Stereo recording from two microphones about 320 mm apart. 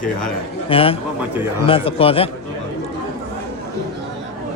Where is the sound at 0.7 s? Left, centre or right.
Centre.